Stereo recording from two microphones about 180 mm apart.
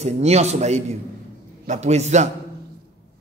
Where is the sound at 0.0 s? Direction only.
35° right (ahead or behind).